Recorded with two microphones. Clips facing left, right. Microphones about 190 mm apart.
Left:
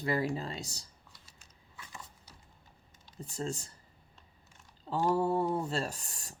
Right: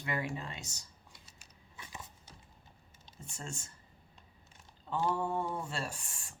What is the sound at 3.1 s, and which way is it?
Speech, 35° left (ahead or behind).